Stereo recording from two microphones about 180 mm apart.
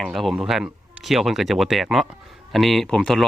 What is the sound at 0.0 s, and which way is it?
Speech, centre (ahead or behind).